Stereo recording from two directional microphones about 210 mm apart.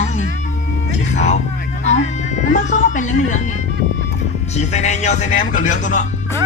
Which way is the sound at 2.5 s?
35° left (ahead or behind).